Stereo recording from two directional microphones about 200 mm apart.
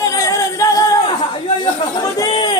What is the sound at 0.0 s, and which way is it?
Singing, 15° left (ahead or behind).